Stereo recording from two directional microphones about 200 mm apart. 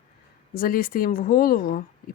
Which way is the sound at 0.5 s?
45° left (ahead or behind).